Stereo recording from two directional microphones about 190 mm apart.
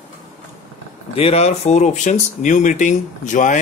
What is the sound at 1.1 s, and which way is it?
Speech, 30° left (ahead or behind).